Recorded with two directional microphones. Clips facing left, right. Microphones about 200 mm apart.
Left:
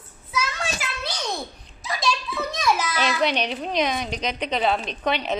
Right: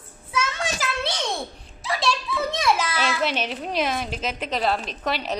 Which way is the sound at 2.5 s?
30° right (ahead or behind).